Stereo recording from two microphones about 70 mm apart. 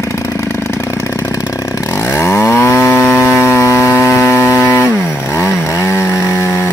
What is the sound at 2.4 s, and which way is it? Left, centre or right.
Chainsaw, left.